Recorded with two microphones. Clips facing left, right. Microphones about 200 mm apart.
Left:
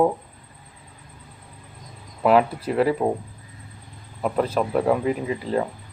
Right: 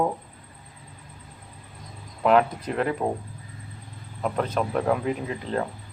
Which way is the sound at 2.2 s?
5° left (ahead or behind).